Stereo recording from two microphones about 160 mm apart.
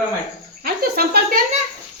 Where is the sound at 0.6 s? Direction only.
75° right (ahead or behind).